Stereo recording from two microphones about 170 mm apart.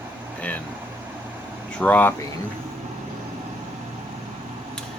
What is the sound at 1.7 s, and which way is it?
Speech, 10° left (ahead or behind).